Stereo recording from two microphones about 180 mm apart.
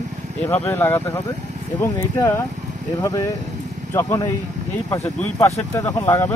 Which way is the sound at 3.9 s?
15° left (ahead or behind).